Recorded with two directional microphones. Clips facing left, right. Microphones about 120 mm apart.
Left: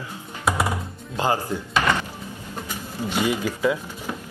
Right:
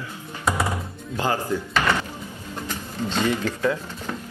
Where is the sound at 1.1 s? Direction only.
15° left (ahead or behind).